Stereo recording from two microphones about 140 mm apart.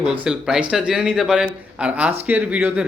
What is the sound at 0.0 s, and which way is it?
Speech, 5° right (ahead or behind).